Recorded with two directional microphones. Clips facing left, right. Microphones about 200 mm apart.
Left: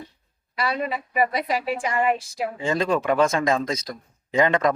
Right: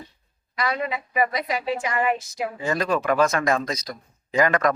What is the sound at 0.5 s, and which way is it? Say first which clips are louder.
A woman's voice: even; 30° left (ahead or behind).